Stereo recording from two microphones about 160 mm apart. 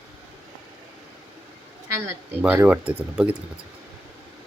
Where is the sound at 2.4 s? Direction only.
10° right (ahead or behind).